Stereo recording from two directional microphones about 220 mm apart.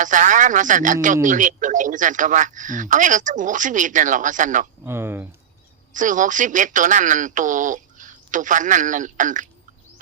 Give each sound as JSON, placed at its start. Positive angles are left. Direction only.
{"t": 0.0, "sound": "speech", "side_deg": -35}
{"t": 4.9, "sound": "speech", "side_deg": -10}
{"t": 5.9, "sound": "speech", "side_deg": -35}